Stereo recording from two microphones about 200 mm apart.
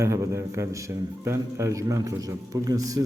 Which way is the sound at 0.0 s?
15° right (ahead or behind).